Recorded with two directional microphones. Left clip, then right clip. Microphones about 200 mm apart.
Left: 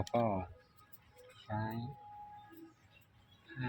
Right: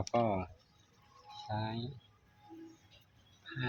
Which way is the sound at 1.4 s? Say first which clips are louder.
Right 1 dB; 10° right (ahead or behind).